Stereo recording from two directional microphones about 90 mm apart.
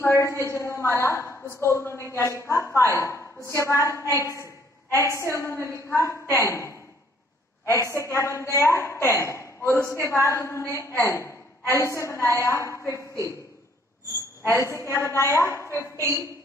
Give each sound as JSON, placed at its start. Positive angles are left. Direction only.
{"t": 0.0, "sound": "a woman's voice", "side_deg": 30}
{"t": 14.5, "sound": "a woman's voice", "side_deg": 35}